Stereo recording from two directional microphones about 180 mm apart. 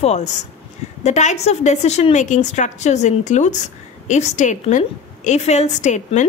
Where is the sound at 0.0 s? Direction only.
40° left (ahead or behind).